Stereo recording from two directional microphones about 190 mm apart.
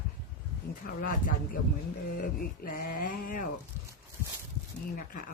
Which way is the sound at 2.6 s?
50° left (ahead or behind).